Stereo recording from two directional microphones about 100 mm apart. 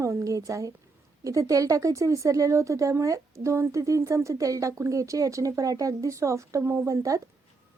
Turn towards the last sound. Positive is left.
turn(degrees=-30)  # may be behind; listen again after turning